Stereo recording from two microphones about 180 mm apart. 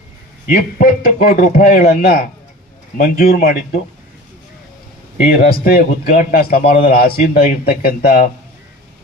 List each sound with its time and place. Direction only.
0.4 s a man's voice: 50° left (ahead or behind)
5.3 s a man's voice: 55° left (ahead or behind)